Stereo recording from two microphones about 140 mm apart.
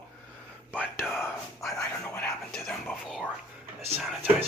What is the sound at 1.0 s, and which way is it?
Speech, centre (ahead or behind).